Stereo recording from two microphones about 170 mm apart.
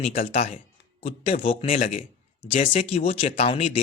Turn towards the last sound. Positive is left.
turn(degrees=35)  # may be behind; listen again after turning